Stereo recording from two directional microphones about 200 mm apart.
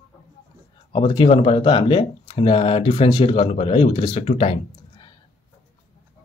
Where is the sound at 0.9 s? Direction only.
25° left (ahead or behind).